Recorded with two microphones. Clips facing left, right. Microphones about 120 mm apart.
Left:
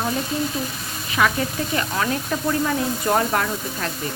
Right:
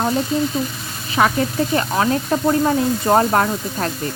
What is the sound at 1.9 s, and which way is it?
Speech, 35° right (ahead or behind).